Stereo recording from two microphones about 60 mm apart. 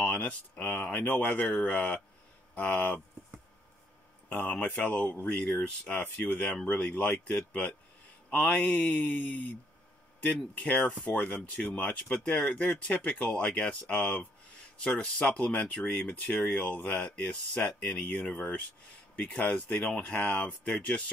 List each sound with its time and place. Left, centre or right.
0.0 s speech: centre
4.5 s speech: centre
4.8 s speech: centre
5.6 s speech: left
10.7 s speech: left
15.2 s speech: centre